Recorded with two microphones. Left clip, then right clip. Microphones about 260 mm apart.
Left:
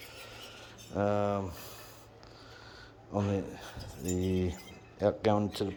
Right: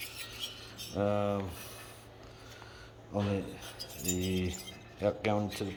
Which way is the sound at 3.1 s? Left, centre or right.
Centre.